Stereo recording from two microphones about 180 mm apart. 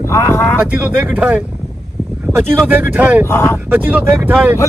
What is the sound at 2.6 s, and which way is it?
Speech, 10° right (ahead or behind).